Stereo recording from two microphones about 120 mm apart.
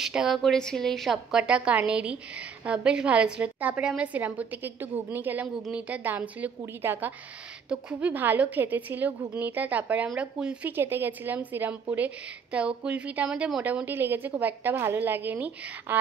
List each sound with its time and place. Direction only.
0.0 s a woman's voice: 5° right (ahead or behind)